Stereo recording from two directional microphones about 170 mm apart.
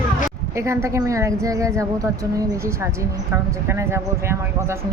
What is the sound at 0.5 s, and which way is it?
A woman's voice, 15° right (ahead or behind).